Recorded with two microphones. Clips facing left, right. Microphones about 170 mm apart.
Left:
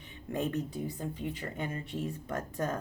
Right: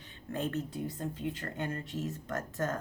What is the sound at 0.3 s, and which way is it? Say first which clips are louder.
A woman's voice: left 2 dB; 15° left (ahead or behind).